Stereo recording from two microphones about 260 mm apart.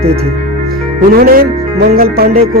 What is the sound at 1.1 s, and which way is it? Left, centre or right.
Speech, right.